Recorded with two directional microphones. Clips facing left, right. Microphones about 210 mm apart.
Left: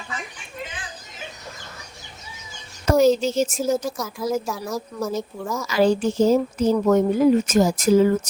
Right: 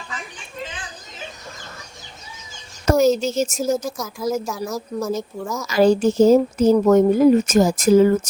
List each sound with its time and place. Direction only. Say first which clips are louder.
2.9 s speech: even; 5° right (ahead or behind)
3.2 s speech: even; 45° right (ahead or behind)
3.9 s speech: right 1 dB; centre (ahead or behind)
5.6 s speech: right 4 dB; 45° right (ahead or behind)